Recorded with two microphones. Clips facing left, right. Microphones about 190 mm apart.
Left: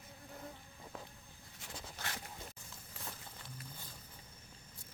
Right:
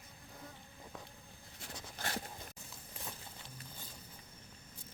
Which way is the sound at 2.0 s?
35° right (ahead or behind).